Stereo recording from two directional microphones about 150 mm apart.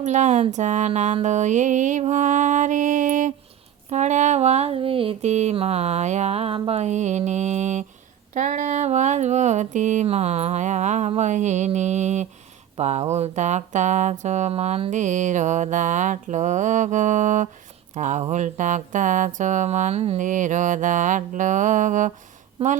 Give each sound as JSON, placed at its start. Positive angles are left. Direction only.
{"t": 0.0, "sound": "speech", "side_deg": -50}
{"t": 22.6, "sound": "a woman's voice", "side_deg": -40}